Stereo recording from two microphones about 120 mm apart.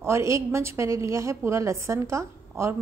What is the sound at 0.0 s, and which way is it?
A woman's voice, 25° right (ahead or behind).